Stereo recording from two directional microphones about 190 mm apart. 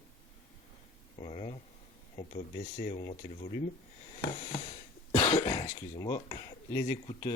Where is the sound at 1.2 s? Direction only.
30° left (ahead or behind).